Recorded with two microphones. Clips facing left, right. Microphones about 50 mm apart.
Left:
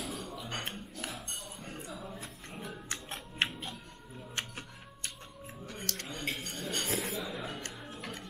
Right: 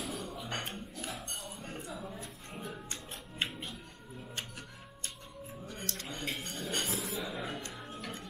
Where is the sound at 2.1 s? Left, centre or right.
Centre.